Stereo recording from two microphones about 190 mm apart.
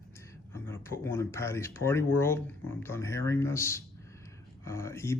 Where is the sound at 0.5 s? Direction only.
15° left (ahead or behind).